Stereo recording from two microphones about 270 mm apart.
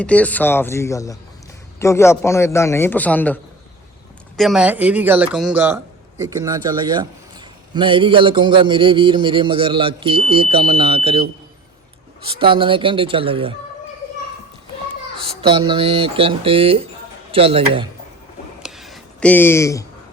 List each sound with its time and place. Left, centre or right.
0.0 s a man's voice: centre
4.4 s a man's voice: centre; by 11.3 s right
12.3 s a man's voice: centre
15.2 s a man's voice: centre
18.6 s a sound: centre